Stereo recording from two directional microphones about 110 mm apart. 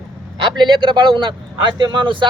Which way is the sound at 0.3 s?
45° right (ahead or behind).